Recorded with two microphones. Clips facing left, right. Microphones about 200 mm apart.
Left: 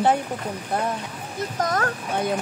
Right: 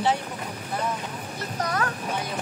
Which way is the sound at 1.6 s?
45° left (ahead or behind).